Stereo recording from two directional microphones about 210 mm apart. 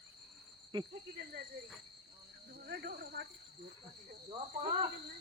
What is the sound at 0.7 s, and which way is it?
Insect, 20° right (ahead or behind).